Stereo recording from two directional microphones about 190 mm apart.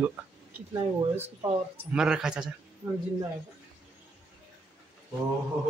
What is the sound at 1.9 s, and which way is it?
Speech, 5° right (ahead or behind).